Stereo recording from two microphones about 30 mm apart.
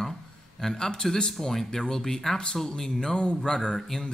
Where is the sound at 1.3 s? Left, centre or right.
Centre.